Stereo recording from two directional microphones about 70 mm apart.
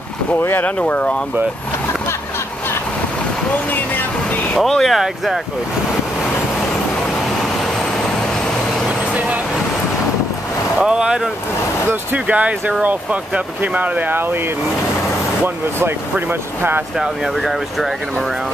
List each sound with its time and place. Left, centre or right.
0.4 s speech: left
0.7 s speech: centre
4.6 s speech: centre
8.8 s vehicle: centre
10.8 s speech: centre
11.9 s speech: right
15.4 s speech: right
17.0 s speech: centre